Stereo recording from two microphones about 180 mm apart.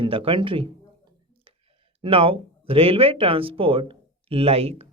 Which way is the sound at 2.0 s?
30° right (ahead or behind).